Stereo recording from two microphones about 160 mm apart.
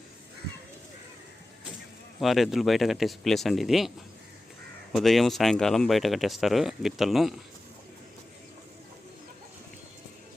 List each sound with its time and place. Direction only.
2.2 s speech: centre (ahead or behind)